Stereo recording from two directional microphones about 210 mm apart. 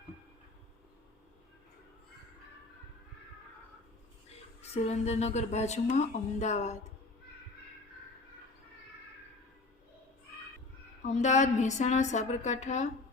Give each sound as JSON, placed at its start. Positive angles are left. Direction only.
{"t": 4.7, "sound": "a woman's voice", "side_deg": 30}
{"t": 11.0, "sound": "a woman's voice", "side_deg": 35}